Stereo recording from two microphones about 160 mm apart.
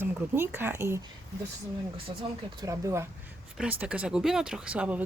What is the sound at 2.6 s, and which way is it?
Speech, 20° right (ahead or behind).